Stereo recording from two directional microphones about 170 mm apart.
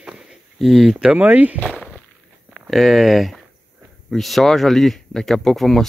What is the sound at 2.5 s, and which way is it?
Speech, centre (ahead or behind).